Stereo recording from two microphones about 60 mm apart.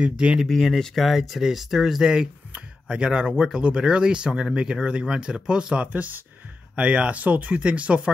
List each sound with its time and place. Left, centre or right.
0.0 s speech: centre
0.4 s speech: centre
5.9 s speech: right